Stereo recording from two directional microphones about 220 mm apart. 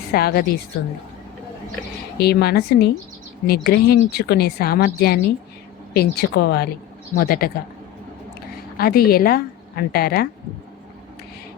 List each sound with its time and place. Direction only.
0.1 s a woman's voice: 45° left (ahead or behind)
2.1 s a woman's voice: 45° left (ahead or behind)
8.8 s a woman's voice: 45° left (ahead or behind)